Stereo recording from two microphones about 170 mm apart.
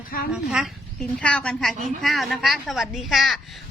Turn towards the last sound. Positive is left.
turn(degrees=0)  # may be behind; listen again after turning